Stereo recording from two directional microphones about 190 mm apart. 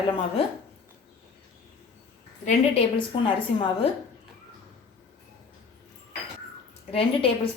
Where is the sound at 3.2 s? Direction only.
25° left (ahead or behind).